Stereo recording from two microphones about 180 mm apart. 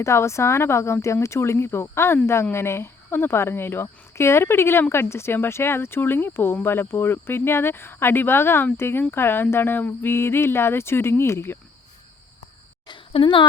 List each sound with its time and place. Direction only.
0.0 s speech: 15° left (ahead or behind)
12.9 s a woman's voice: 30° left (ahead or behind)